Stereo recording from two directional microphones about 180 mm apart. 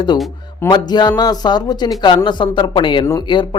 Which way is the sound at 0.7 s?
25° left (ahead or behind).